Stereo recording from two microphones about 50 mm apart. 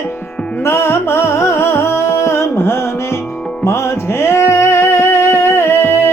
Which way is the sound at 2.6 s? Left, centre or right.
Left.